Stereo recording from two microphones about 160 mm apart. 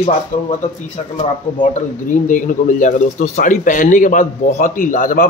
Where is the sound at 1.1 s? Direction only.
50° left (ahead or behind).